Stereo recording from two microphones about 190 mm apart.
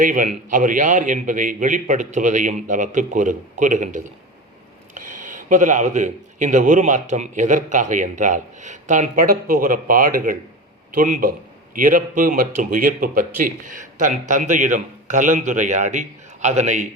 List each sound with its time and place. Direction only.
0.0 s a man's voice: 45° right (ahead or behind)